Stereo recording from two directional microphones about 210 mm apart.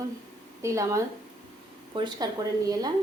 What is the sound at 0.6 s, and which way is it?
A woman's voice, 15° right (ahead or behind).